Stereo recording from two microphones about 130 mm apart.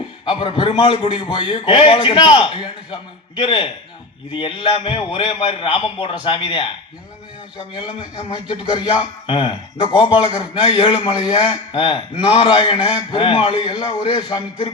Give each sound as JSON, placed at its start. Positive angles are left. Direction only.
{"t": 0.3, "sound": "a man's voice", "side_deg": 40}
{"t": 8.3, "sound": "a man's voice", "side_deg": 35}